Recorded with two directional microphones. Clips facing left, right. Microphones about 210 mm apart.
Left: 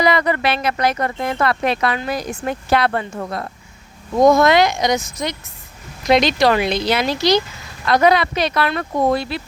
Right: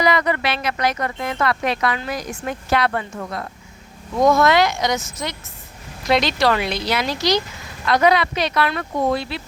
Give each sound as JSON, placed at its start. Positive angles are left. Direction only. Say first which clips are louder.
{"t": 0.0, "sound": "speech", "louder": "left 2 dB", "side_deg": 30}
{"t": 0.4, "sound": "speech", "louder": "left 4 dB", "side_deg": 50}
{"t": 0.8, "sound": "speech", "louder": "left 3 dB", "side_deg": 30}
{"t": 4.4, "sound": "a woman's voice", "louder": "left 2 dB", "side_deg": 20}
{"t": 7.9, "sound": "speech", "louder": "left 2 dB", "side_deg": 40}